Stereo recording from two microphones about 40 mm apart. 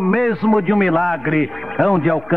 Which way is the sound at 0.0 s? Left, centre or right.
Centre.